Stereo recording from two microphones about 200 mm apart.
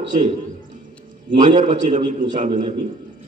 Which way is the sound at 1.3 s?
40° right (ahead or behind).